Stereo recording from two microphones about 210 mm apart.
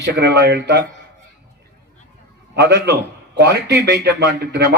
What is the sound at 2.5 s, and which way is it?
A man's voice, 50° right (ahead or behind).